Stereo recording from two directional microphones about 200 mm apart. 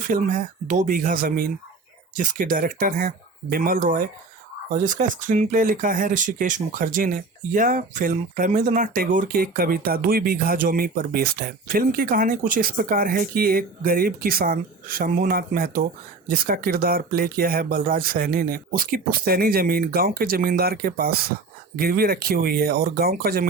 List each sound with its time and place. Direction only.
0.1 s speech: 40° right (ahead or behind)